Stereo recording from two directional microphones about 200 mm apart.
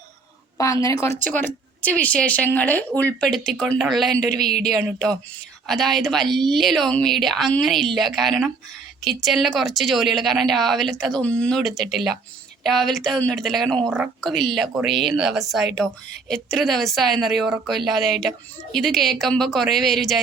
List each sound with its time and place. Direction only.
0.6 s speech: 15° left (ahead or behind)
5.6 s a woman's voice: centre (ahead or behind)